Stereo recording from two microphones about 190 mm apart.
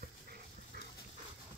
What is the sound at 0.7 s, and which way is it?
Dog, 55° right (ahead or behind).